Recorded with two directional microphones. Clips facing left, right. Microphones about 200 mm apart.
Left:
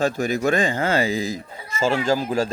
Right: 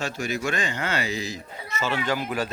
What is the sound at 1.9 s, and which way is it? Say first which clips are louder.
Speech: left 5 dB; 30° left (ahead or behind).